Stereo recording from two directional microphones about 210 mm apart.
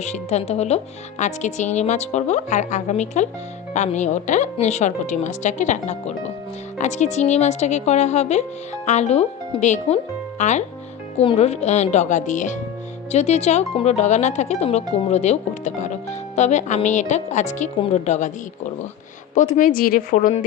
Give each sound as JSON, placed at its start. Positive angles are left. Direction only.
{"t": 0.0, "sound": "speech", "side_deg": 30}
{"t": 19.3, "sound": "speech", "side_deg": 35}